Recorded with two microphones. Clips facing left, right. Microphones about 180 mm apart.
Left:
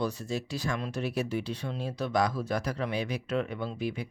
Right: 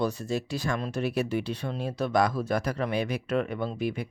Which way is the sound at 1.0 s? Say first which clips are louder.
Right 4 dB; 60° right (ahead or behind).